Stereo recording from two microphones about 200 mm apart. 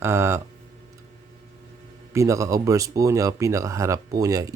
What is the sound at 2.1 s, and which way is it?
Speech, 15° right (ahead or behind).